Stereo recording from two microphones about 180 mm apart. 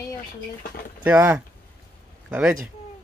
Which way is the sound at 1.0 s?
10° right (ahead or behind).